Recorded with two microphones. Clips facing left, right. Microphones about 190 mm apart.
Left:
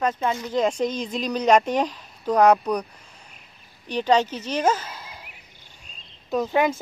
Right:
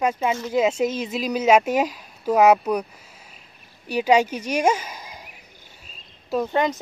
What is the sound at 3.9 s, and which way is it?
Speech, 10° right (ahead or behind).